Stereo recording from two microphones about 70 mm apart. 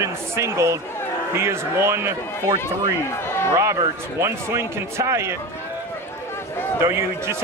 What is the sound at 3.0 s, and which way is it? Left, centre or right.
Speech, left.